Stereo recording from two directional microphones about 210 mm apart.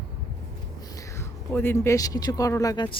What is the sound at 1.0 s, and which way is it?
Speech, 10° left (ahead or behind).